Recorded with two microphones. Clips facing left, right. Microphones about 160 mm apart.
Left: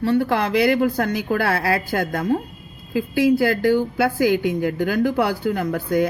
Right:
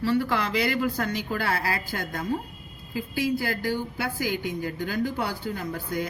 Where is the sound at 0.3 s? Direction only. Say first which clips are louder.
Left 8 dB; 60° left (ahead or behind).